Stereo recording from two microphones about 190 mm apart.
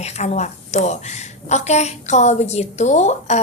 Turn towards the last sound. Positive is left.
turn(degrees=35)  # may be behind; listen again after turning